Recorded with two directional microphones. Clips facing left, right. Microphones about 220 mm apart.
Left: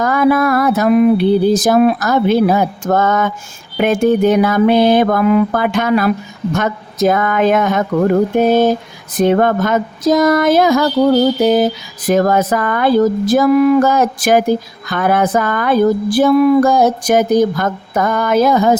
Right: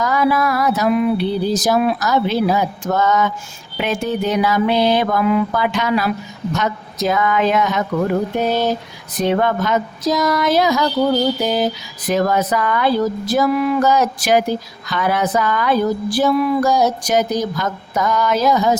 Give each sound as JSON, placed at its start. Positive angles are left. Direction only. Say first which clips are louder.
{"t": 0.0, "sound": "speech", "louder": "left 5 dB", "side_deg": 55}